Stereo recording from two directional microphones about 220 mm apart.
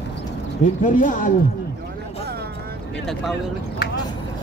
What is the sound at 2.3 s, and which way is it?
Vehicle, 45° right (ahead or behind).